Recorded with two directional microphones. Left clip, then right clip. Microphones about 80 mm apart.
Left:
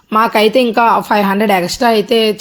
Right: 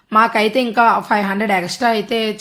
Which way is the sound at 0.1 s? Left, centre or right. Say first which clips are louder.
Left 3 dB; left.